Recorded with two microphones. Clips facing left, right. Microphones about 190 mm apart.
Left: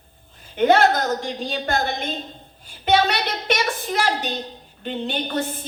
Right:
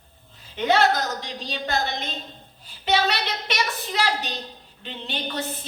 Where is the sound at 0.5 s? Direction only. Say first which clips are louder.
Left 4 dB; 50° left (ahead or behind).